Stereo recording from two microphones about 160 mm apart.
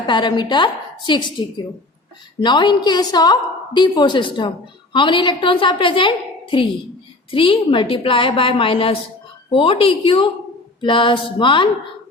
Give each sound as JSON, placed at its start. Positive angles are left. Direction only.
{"t": 0.1, "sound": "a woman's voice", "side_deg": 30}